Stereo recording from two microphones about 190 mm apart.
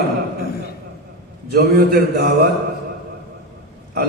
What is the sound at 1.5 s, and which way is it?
Mantra, 55° right (ahead or behind).